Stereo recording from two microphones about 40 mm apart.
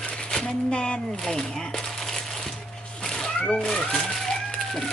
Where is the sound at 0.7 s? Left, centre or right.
Left.